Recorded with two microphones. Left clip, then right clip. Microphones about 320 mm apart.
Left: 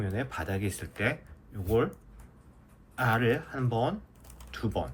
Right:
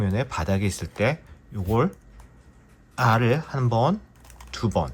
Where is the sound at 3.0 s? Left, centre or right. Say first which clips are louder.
Right 7 dB; centre.